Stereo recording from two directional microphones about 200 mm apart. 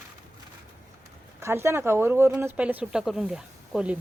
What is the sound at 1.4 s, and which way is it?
Speech, 10° right (ahead or behind).